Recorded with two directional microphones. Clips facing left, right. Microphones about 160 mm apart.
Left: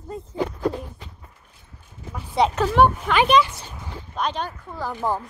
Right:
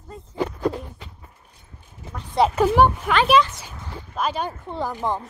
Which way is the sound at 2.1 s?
Centre (ahead or behind).